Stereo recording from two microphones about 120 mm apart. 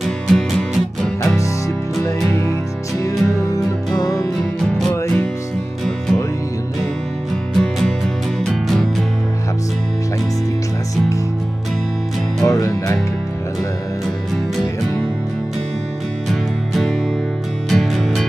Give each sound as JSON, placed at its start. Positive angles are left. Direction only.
{"t": 0.0, "sound": "music", "side_deg": 0}
{"t": 3.0, "sound": "music", "side_deg": 30}
{"t": 4.6, "sound": "music", "side_deg": 5}
{"t": 7.5, "sound": "music", "side_deg": 5}
{"t": 12.4, "sound": "music", "side_deg": 30}
{"t": 16.3, "sound": "music", "side_deg": 0}